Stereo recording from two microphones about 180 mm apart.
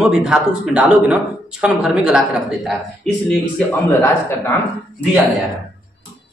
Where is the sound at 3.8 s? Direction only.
15° left (ahead or behind).